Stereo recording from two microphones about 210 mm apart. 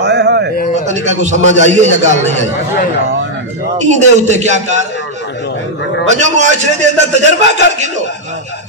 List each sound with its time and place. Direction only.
0.0 s a sound: 55° right (ahead or behind)
0.7 s a man's voice: 35° right (ahead or behind)
3.7 s a man's voice: 35° right (ahead or behind)
6.0 s a man's voice: 35° right (ahead or behind)